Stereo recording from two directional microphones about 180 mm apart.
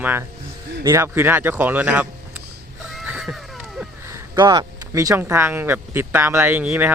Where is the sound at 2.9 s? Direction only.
5° right (ahead or behind).